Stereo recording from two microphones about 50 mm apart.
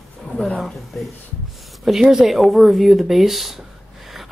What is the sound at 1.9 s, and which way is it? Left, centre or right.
Speech, centre.